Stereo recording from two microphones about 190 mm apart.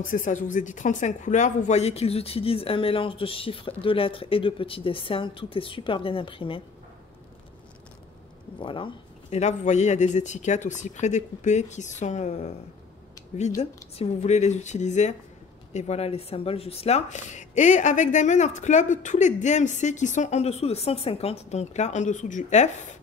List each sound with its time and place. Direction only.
0.0 s speech: 45° left (ahead or behind); by 6.6 s 30° left (ahead or behind)
8.5 s speech: 25° left (ahead or behind)
13.6 s speech: 35° left (ahead or behind)